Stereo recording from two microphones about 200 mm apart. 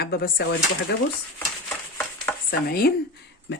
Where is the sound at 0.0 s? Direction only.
50° left (ahead or behind).